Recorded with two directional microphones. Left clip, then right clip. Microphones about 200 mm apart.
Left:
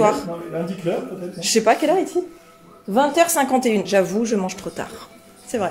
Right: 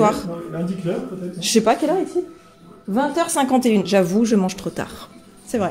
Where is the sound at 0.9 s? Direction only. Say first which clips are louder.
Left 2 dB; 25° left (ahead or behind).